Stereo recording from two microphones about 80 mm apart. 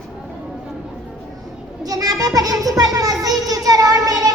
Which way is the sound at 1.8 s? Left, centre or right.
Right.